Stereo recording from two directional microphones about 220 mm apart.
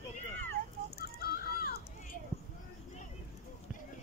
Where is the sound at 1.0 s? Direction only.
40° left (ahead or behind).